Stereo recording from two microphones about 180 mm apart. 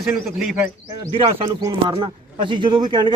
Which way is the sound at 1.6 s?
25° right (ahead or behind).